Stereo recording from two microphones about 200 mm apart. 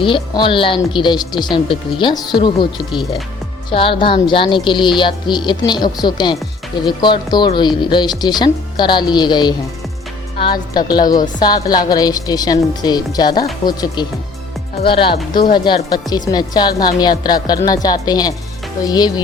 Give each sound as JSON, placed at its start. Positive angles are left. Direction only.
{"t": 0.0, "sound": "speech", "side_deg": 25}
{"t": 15.1, "sound": "speech", "side_deg": 50}
{"t": 15.4, "sound": "speech", "side_deg": 25}